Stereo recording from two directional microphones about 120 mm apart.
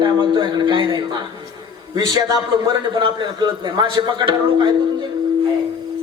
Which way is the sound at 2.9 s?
40° right (ahead or behind).